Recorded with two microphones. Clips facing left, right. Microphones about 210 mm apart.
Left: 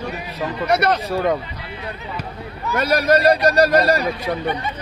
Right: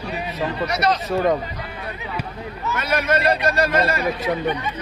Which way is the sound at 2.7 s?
40° left (ahead or behind).